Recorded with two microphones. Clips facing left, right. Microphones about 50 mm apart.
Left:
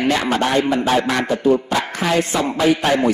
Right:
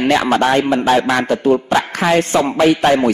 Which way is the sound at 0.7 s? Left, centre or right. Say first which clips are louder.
Right 3 dB; right.